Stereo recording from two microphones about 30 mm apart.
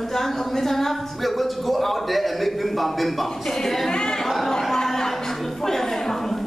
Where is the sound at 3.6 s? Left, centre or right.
Centre.